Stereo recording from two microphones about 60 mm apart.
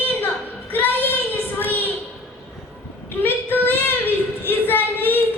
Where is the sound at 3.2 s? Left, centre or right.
Left.